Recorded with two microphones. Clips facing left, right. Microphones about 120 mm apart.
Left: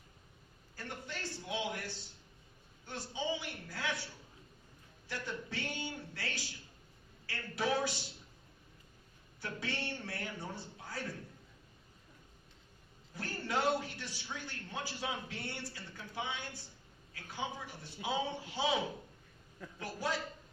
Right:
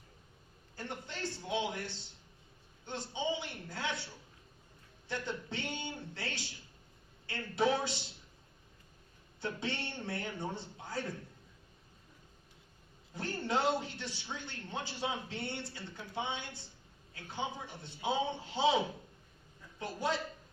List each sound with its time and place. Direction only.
0.8 s a sound: 25° right (ahead or behind)
2.8 s a man's voice: 25° right (ahead or behind)
9.4 s a man's voice: 25° right (ahead or behind)
13.1 s a man's voice: 20° right (ahead or behind)
19.8 s a man's voice: 25° right (ahead or behind)